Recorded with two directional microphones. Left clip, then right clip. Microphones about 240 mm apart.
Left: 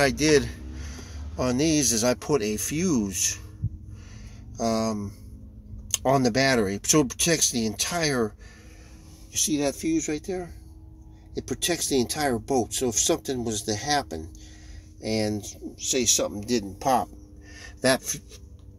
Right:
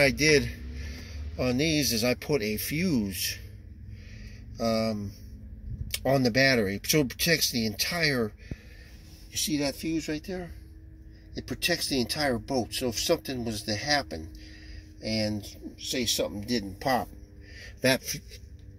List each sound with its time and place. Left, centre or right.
0.2 s speech: centre
4.6 s speech: centre
6.0 s speech: centre
9.5 s speech: centre